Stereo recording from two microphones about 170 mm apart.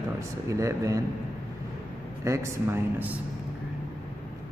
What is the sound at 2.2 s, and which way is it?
Speech, 15° right (ahead or behind).